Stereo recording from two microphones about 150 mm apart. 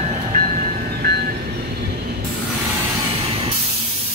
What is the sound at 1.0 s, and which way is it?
Vehicle, 90° right.